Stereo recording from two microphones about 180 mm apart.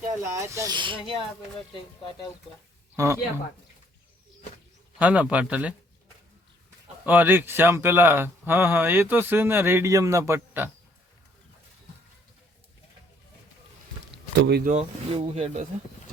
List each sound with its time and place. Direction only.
0.3 s speech: 20° right (ahead or behind)
2.9 s speech: 15° right (ahead or behind)
4.9 s speech: 5° right (ahead or behind)
7.0 s speech: 10° right (ahead or behind)
14.1 s a sound: 65° right (ahead or behind)
14.7 s speech: 35° right (ahead or behind)